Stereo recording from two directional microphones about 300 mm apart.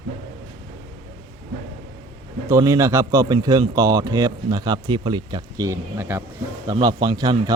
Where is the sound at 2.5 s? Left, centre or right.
Centre.